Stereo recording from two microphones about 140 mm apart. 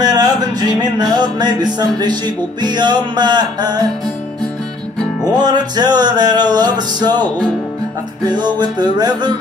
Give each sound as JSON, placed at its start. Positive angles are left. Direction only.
{"t": 0.0, "sound": "music", "side_deg": -30}
{"t": 5.4, "sound": "music", "side_deg": -30}
{"t": 8.3, "sound": "music", "side_deg": -30}